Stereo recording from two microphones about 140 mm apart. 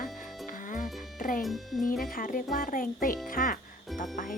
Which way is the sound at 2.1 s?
75° left (ahead or behind).